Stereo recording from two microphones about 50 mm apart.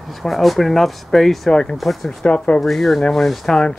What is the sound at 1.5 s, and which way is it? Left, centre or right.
Speech, centre.